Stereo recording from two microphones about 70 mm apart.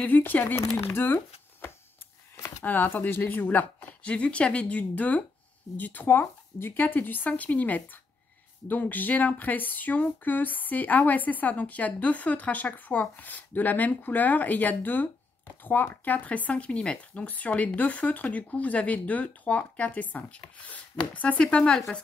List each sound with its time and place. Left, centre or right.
0.0 s speech: left